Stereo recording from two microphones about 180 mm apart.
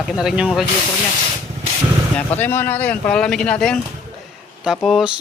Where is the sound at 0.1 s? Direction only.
5° right (ahead or behind).